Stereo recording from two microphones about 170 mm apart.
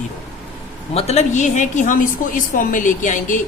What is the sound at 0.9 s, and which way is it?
A woman's voice, 40° left (ahead or behind).